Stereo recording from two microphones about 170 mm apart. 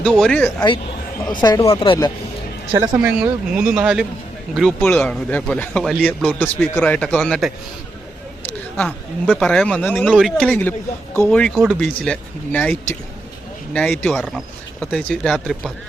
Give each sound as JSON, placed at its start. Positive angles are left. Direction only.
{"t": 0.0, "sound": "speech", "side_deg": 5}
{"t": 1.3, "sound": "speech", "side_deg": 25}
{"t": 3.0, "sound": "speech", "side_deg": -5}
{"t": 8.9, "sound": "speech", "side_deg": 0}